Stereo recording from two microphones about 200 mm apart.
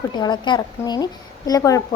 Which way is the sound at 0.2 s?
20° left (ahead or behind).